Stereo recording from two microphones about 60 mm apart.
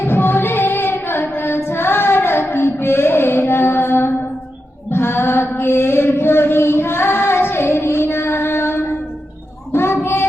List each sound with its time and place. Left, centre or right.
0.0 s music: left
1.4 s female singing: left
4.9 s a sound: left
9.7 s child singing: left